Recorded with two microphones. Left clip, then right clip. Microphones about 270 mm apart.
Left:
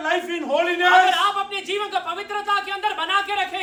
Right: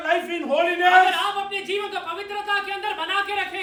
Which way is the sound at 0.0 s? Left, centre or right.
Centre.